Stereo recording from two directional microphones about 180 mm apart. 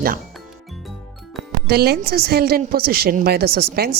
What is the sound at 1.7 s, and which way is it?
A woman's voice, 60° right (ahead or behind).